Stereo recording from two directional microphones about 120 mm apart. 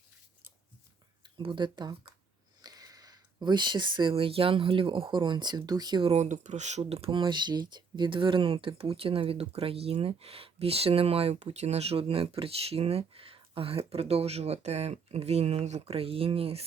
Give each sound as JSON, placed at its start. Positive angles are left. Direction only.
{"t": 1.4, "sound": "speech", "side_deg": -40}
{"t": 6.1, "sound": "speech", "side_deg": -85}